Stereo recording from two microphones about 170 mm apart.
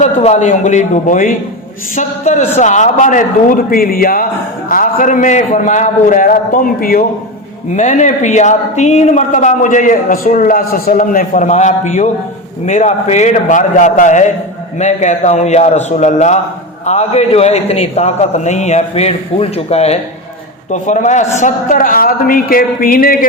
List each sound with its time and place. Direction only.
0.0 s speech: 40° left (ahead or behind); by 7.0 s 60° left (ahead or behind)
7.8 s a man's voice: 45° left (ahead or behind)